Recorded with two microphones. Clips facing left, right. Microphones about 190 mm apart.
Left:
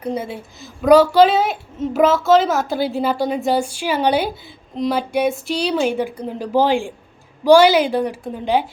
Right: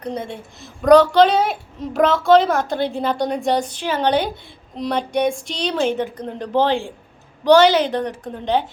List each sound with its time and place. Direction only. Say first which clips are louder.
0.0 s a woman's voice: left 3 dB; 5° left (ahead or behind)